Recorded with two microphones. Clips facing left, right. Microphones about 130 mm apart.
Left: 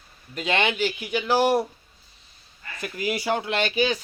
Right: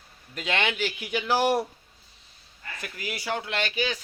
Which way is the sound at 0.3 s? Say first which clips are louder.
Left 4 dB; centre (ahead or behind).